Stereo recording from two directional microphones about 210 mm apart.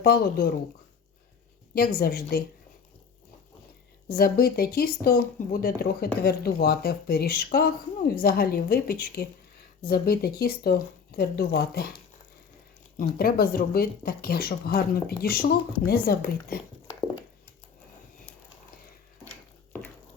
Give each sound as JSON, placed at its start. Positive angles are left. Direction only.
{"t": 0.0, "sound": "speech", "side_deg": 45}
{"t": 1.7, "sound": "speech", "side_deg": 45}
{"t": 4.1, "sound": "speech", "side_deg": 45}
{"t": 13.0, "sound": "speech", "side_deg": 45}